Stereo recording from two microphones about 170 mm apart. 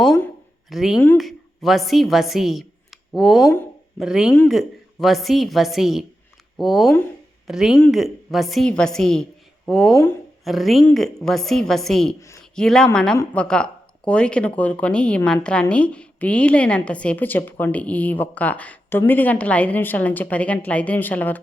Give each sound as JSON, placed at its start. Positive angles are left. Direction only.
{"t": 0.0, "sound": "a sound", "side_deg": 5}
{"t": 0.7, "sound": "a woman's voice", "side_deg": 0}
{"t": 9.9, "sound": "a woman's voice", "side_deg": 15}
{"t": 10.4, "sound": "a woman's voice", "side_deg": 0}